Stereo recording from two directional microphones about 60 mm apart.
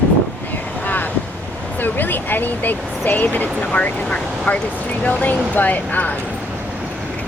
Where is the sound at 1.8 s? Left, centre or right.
Left.